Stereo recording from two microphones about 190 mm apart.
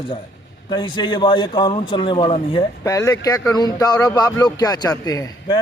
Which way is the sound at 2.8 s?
20° left (ahead or behind).